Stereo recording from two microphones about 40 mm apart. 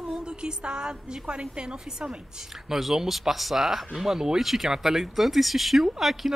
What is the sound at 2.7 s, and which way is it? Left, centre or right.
Speech, centre.